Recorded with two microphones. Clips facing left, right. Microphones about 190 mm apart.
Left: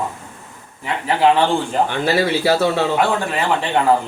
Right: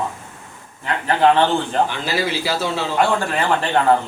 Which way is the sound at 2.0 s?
60° left (ahead or behind).